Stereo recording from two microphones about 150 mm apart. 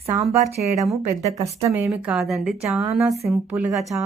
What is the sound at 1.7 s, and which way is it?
Speech, 20° right (ahead or behind).